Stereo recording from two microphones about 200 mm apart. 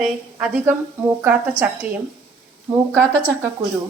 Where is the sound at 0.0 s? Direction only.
5° right (ahead or behind).